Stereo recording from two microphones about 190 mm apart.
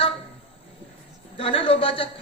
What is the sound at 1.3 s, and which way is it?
Speech, 30° left (ahead or behind).